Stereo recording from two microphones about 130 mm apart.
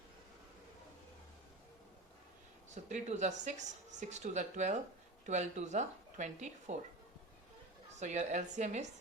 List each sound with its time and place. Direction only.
2.6 s a woman's voice: 65° right (ahead or behind)
7.9 s a woman's voice: 65° right (ahead or behind)